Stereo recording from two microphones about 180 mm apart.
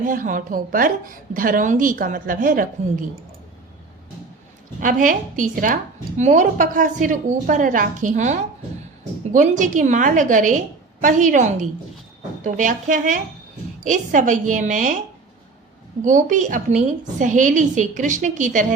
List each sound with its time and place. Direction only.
0.0 s a woman's voice: 50° right (ahead or behind)
4.8 s a woman's voice: 45° right (ahead or behind)
16.0 s a woman's voice: 45° right (ahead or behind)